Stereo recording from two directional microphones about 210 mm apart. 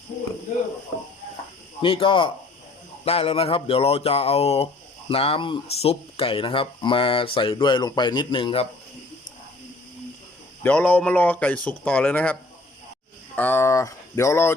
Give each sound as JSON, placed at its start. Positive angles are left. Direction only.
{"t": 1.8, "sound": "speech", "side_deg": 25}
{"t": 10.6, "sound": "a man's voice", "side_deg": 5}